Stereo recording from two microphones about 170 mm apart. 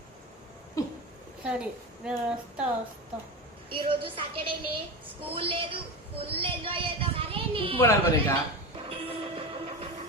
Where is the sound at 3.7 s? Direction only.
30° right (ahead or behind).